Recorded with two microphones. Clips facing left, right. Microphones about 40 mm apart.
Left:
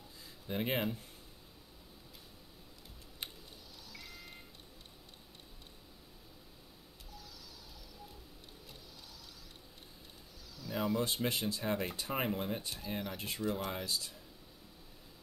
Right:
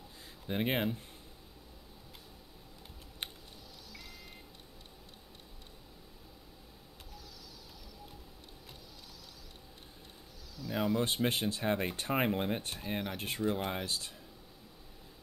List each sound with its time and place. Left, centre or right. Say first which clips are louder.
0.5 s speech: right 2 dB; right
3.2 s typing: right 3 dB; right
3.9 s beep: left 1 dB; centre
10.5 s a sound: right 3 dB; centre
11.0 s speech: right 3 dB; right
11.2 s speech: right 3 dB; right
13.4 s speech: right 3 dB; right
13.8 s speech: right 1 dB; right